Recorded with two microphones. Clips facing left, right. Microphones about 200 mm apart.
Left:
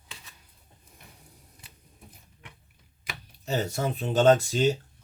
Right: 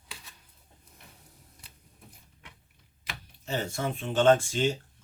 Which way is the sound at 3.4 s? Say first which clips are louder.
Left 3 dB; 40° left (ahead or behind).